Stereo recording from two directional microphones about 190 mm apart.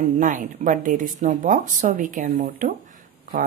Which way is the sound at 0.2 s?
45° right (ahead or behind).